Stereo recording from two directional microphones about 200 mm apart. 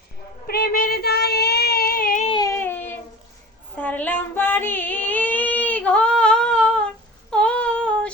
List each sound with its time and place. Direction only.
0.4 s child singing: 50° left (ahead or behind)
2.2 s a sound: 20° left (ahead or behind)
3.8 s female singing: 10° left (ahead or behind)